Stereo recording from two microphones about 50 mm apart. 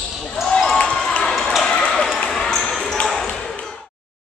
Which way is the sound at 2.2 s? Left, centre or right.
Centre.